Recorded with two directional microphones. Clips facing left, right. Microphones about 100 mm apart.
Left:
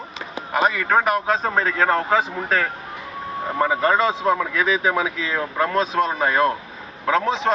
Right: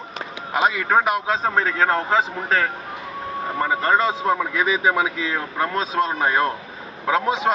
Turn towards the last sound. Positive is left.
turn(degrees=-10)  # may be behind; listen again after turning